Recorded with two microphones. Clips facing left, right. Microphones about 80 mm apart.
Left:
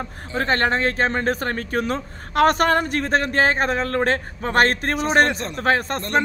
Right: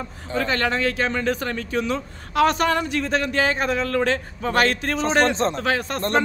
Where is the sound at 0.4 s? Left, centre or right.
Left.